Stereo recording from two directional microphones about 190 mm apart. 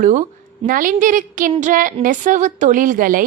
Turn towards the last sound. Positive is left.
turn(degrees=-45)  # may be behind; listen again after turning